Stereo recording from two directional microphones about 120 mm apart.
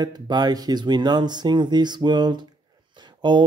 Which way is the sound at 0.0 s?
35° right (ahead or behind).